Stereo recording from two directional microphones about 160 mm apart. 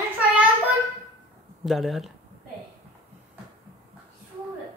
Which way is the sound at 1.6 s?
Centre (ahead or behind).